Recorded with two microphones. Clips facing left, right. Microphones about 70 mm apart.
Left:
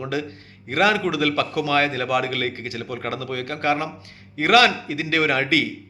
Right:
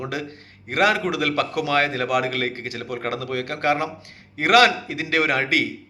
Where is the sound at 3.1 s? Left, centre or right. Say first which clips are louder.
Right 2 dB; right.